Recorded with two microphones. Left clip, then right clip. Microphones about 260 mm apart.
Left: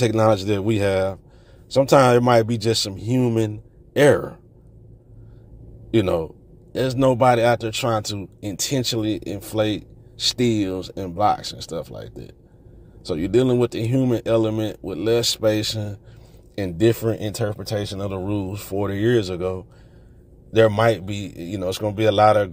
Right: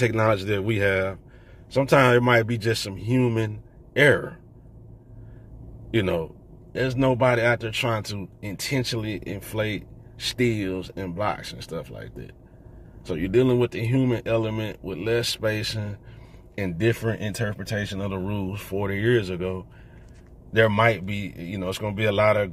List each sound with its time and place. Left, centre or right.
0.3 s speech: left
5.9 s speech: left